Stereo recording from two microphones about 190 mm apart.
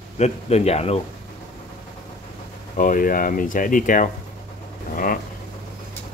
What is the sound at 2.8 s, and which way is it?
Speech, 45° left (ahead or behind).